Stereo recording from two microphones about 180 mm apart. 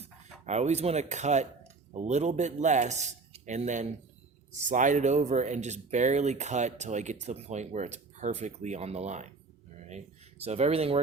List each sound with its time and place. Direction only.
0.0 s speech: 40° right (ahead or behind)